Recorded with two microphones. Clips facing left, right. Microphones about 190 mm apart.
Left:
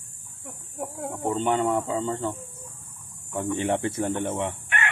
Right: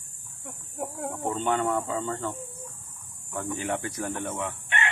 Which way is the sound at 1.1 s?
15° left (ahead or behind).